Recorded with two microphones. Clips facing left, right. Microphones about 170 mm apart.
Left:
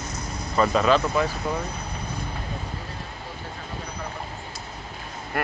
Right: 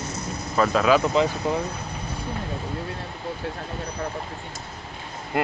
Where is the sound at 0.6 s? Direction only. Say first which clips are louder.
Right 1 dB; centre (ahead or behind).